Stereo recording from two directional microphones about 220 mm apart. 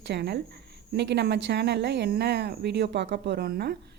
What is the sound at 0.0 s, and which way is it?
A woman's voice, 50° right (ahead or behind).